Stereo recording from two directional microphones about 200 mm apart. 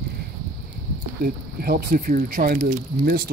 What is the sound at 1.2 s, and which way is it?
Speech, 50° right (ahead or behind).